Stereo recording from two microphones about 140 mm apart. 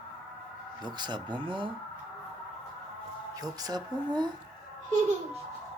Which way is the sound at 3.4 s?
30° right (ahead or behind).